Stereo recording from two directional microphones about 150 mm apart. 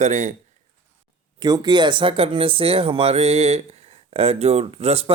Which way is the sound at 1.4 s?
25° right (ahead or behind).